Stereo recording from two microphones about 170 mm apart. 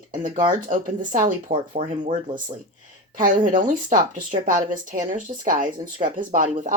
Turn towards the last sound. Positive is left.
turn(degrees=-50)  # may be behind; listen again after turning